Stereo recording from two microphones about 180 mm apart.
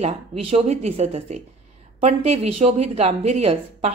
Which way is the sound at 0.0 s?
35° right (ahead or behind).